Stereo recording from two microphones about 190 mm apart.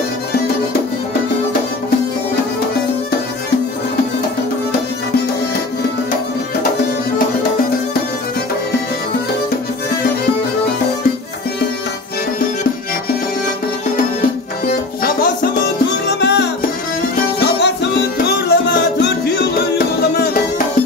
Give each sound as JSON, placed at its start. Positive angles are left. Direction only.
{"t": 16.2, "sound": "music", "side_deg": 65}
{"t": 20.2, "sound": "music", "side_deg": 45}